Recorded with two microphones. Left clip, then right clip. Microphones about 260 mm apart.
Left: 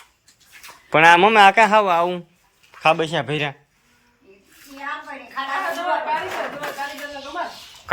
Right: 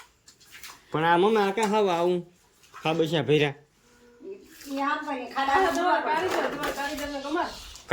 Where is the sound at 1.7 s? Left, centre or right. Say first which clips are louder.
Left 7 dB; centre.